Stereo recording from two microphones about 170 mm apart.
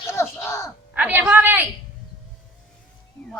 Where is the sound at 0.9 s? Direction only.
10° right (ahead or behind).